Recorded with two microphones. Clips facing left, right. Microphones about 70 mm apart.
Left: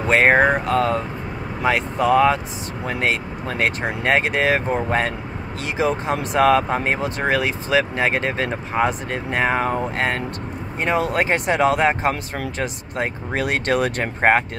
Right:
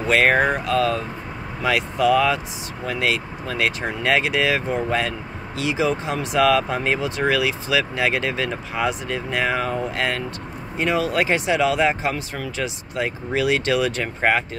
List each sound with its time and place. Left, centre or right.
0.1 s speech: left